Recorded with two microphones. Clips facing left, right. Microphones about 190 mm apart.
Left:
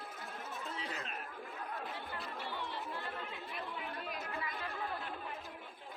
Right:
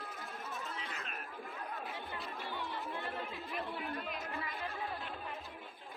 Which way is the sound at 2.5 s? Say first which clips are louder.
Right 3 dB; 15° right (ahead or behind).